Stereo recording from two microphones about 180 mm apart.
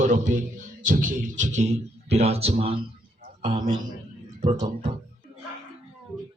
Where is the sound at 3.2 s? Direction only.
50° right (ahead or behind).